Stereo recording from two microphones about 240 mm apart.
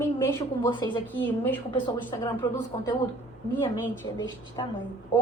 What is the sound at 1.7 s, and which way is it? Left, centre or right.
Speech, centre.